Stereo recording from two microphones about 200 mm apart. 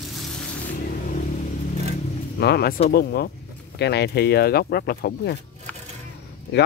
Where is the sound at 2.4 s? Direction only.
55° left (ahead or behind).